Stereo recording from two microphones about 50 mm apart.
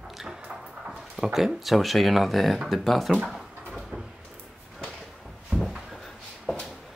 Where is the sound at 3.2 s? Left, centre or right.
Centre.